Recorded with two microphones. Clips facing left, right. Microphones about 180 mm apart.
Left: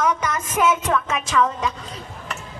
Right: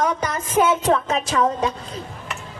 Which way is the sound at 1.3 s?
30° right (ahead or behind).